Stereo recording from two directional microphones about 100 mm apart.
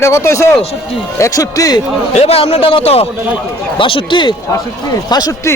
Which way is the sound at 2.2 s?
85° left.